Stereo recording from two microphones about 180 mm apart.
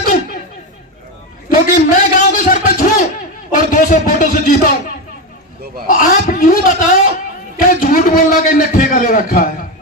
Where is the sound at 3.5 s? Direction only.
50° left (ahead or behind).